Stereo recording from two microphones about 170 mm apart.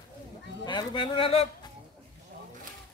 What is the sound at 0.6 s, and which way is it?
Speech, 30° left (ahead or behind).